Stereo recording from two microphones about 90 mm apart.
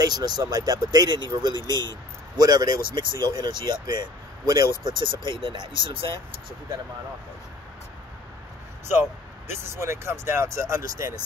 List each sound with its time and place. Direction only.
0.0 s speech: 45° right (ahead or behind)
4.8 s speech: 60° right (ahead or behind)
8.9 s speech: 25° right (ahead or behind)